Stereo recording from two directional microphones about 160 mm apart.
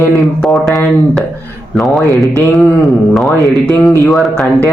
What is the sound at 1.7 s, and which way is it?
Speech, centre (ahead or behind).